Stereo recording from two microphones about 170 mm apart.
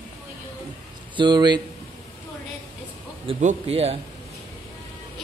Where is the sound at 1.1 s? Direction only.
25° right (ahead or behind).